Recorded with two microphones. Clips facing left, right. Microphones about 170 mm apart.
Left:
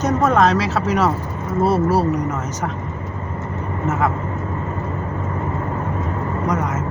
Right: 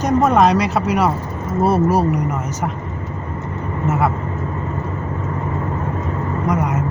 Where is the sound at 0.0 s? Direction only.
15° right (ahead or behind).